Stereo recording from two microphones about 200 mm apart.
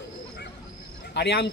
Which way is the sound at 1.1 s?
55° left (ahead or behind).